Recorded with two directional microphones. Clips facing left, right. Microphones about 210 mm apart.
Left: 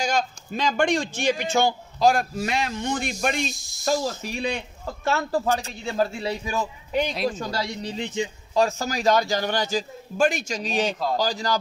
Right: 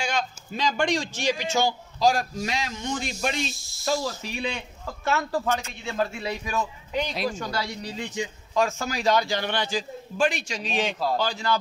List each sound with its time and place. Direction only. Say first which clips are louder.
0.0 s a man's voice: left 3 dB; 45° left (ahead or behind)
3.5 s speech: even; 15° left (ahead or behind)
3.8 s a man's voice: left 2 dB; 45° left (ahead or behind); by 8.6 s 25° left (ahead or behind)
8.6 s a man's voice: left 2 dB; 40° left (ahead or behind)